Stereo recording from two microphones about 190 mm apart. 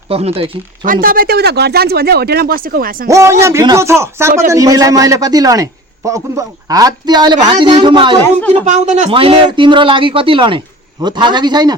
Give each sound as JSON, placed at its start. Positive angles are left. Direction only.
{"t": 0.1, "sound": "speech", "side_deg": -30}
{"t": 1.0, "sound": "speech", "side_deg": -50}
{"t": 3.1, "sound": "a man's voice", "side_deg": -15}
{"t": 8.2, "sound": "speech", "side_deg": 10}
{"t": 8.6, "sound": "a man's voice", "side_deg": -40}